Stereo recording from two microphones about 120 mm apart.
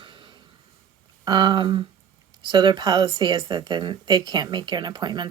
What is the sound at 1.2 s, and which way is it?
A woman's voice, 40° right (ahead or behind).